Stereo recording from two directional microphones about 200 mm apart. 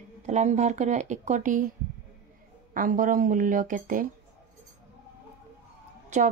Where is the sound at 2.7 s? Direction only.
40° right (ahead or behind).